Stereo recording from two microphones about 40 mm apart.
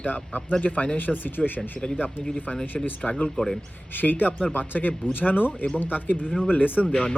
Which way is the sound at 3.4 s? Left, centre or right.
Left.